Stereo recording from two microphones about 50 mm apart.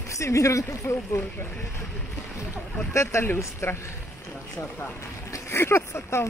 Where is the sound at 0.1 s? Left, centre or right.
Left.